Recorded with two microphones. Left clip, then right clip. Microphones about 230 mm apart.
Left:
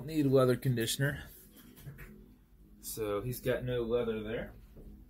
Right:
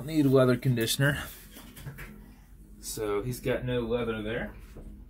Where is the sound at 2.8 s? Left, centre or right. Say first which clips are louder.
Right 5 dB; centre.